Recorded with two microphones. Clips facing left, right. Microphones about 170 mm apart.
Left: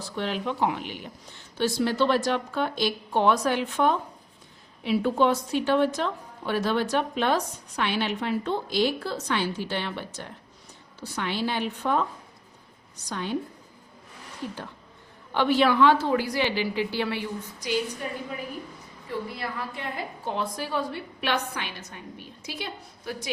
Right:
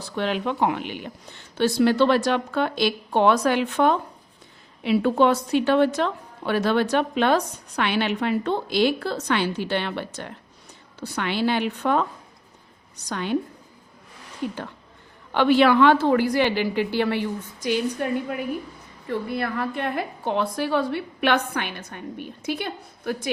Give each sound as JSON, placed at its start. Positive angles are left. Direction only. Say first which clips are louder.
{"t": 0.2, "sound": "a woman's voice", "louder": "right 4 dB", "side_deg": -65}
{"t": 13.1, "sound": "a woman's voice", "louder": "right 3 dB", "side_deg": -70}
{"t": 14.4, "sound": "a woman's voice", "louder": "right 6 dB", "side_deg": -65}